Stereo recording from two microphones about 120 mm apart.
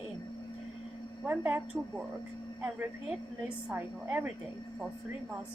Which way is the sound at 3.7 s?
15° right (ahead or behind).